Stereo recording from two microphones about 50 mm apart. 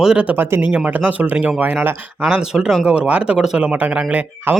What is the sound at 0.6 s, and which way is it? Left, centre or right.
Speech, right.